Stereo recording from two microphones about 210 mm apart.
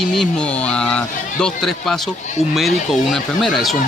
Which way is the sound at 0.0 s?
Centre (ahead or behind).